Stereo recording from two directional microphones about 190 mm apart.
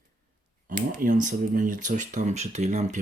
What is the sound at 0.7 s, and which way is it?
Speech, 45° right (ahead or behind).